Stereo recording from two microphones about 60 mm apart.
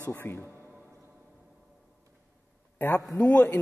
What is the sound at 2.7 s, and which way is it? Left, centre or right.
Speech, left.